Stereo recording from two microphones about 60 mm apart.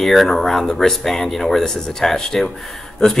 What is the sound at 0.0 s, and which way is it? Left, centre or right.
A man's voice, centre.